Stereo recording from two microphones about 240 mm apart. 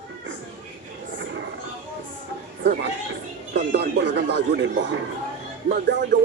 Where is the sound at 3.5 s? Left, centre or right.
Right.